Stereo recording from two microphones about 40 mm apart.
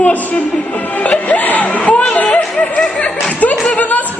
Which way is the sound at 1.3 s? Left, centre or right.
Left.